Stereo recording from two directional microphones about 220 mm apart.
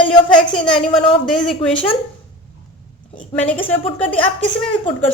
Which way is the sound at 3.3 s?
5° left (ahead or behind).